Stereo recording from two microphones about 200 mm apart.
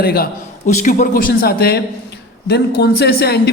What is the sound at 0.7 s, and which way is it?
A man's voice, 35° left (ahead or behind).